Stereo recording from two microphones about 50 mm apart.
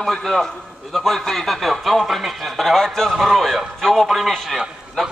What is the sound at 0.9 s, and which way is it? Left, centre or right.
Speech, centre.